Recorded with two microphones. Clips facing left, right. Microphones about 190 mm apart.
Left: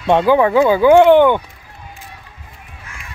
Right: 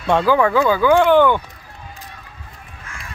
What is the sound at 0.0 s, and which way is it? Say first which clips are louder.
Speech: left 3 dB; 20° left (ahead or behind).